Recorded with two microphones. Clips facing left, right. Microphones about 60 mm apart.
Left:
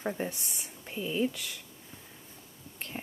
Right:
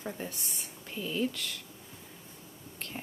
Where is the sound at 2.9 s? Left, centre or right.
Centre.